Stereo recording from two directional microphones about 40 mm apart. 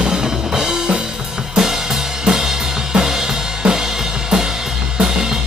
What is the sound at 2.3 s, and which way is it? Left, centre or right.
Drum kit, centre.